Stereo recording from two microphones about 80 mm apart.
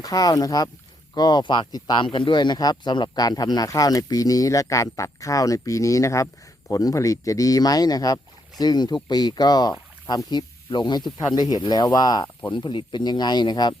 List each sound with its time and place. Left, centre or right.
0.0 s speech: left
2.1 s speech: left
12.5 s speech: left